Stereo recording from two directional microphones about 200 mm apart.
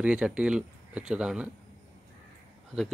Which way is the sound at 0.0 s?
5° right (ahead or behind).